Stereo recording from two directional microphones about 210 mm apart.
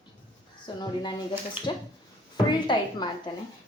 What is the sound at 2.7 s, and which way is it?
Speech, 20° left (ahead or behind).